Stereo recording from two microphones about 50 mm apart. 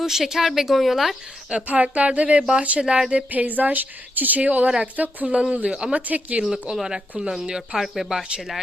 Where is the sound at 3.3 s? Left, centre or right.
Right.